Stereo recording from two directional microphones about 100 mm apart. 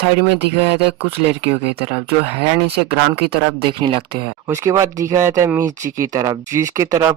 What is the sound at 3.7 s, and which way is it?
Speech, 60° right (ahead or behind).